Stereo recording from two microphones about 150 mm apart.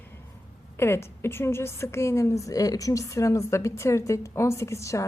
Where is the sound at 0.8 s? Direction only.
15° left (ahead or behind).